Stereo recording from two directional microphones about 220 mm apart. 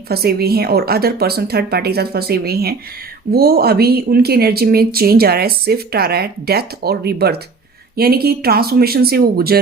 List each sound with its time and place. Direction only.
0.1 s speech: 45° right (ahead or behind)